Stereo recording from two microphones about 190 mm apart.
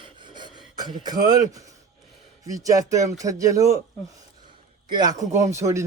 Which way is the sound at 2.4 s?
15° right (ahead or behind).